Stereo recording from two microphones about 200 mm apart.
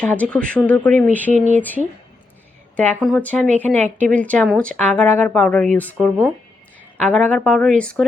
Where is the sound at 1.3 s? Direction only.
35° right (ahead or behind).